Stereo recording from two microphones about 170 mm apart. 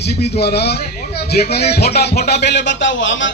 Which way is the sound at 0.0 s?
75° left (ahead or behind).